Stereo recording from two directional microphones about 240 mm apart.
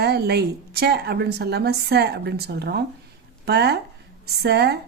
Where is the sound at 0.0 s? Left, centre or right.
Right.